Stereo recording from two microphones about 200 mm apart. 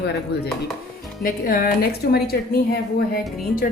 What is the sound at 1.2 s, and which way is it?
A woman's voice, 45° left (ahead or behind).